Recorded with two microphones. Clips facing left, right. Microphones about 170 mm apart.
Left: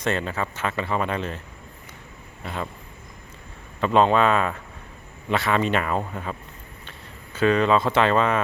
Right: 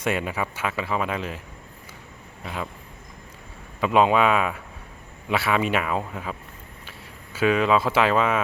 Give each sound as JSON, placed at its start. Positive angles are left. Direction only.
{"t": 0.0, "sound": "speech", "side_deg": -10}
{"t": 2.4, "sound": "speech", "side_deg": -5}
{"t": 3.8, "sound": "speech", "side_deg": -5}
{"t": 7.3, "sound": "speech", "side_deg": -5}